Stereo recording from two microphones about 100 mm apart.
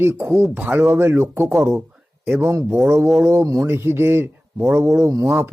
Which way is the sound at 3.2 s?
25° right (ahead or behind).